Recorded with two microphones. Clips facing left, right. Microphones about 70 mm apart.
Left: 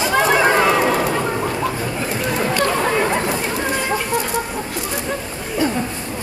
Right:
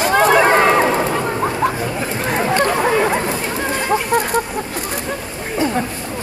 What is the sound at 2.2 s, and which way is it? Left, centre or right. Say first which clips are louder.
Chatter: right 2 dB; right.